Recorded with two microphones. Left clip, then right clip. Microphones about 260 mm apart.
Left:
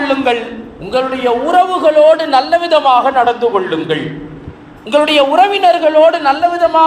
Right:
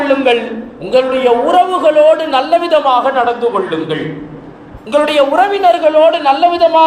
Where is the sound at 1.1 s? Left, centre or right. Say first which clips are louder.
Right 3 dB; left.